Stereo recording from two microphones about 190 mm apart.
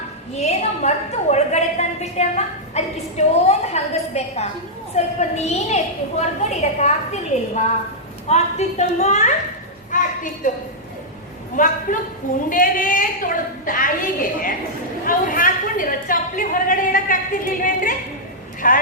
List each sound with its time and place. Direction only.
0.3 s a woman's voice: 35° left (ahead or behind)
9.9 s a sound: 45° left (ahead or behind)
10.4 s a woman's voice: 45° left (ahead or behind)